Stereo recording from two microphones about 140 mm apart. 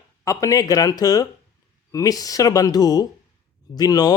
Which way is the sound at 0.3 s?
25° left (ahead or behind).